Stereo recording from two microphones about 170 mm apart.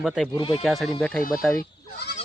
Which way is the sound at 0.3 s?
30° left (ahead or behind).